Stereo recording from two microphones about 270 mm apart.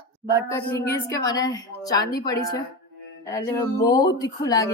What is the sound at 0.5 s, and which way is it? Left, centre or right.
A woman's voice, centre.